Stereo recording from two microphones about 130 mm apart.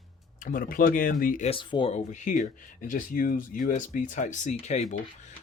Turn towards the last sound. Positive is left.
turn(degrees=60)  # may be behind; listen again after turning